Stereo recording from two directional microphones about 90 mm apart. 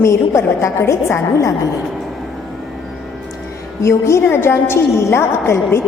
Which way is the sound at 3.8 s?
30° left (ahead or behind).